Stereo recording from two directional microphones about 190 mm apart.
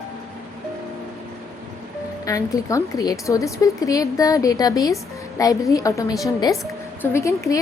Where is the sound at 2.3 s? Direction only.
15° left (ahead or behind).